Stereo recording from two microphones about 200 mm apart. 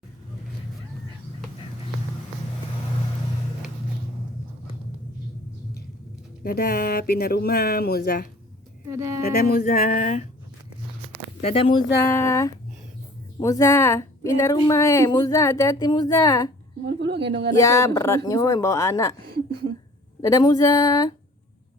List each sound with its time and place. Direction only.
6.4 s speech: 50° left (ahead or behind)
8.9 s a woman's voice: 15° right (ahead or behind)
9.2 s speech: 50° left (ahead or behind)
11.4 s speech: 25° left (ahead or behind)
12.0 s a woman's voice: 15° left (ahead or behind)
16.8 s speech: 55° right (ahead or behind)
17.6 s a woman's voice: 15° left (ahead or behind)
19.2 s a woman's voice: 50° right (ahead or behind)
20.2 s a woman's voice: 15° left (ahead or behind)